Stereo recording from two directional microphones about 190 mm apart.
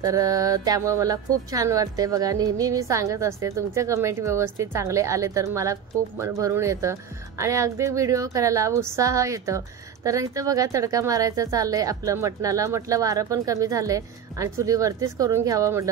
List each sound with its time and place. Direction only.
0.0 s speech: 20° right (ahead or behind)